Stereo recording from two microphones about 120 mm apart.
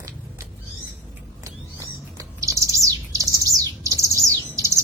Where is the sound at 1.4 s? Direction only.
25° right (ahead or behind).